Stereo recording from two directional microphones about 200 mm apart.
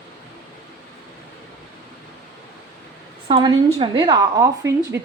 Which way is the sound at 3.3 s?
20° right (ahead or behind).